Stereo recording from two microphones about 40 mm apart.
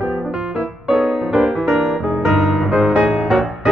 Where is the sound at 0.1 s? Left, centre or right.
Centre.